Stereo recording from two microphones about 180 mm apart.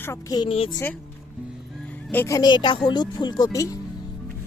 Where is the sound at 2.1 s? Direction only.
15° left (ahead or behind).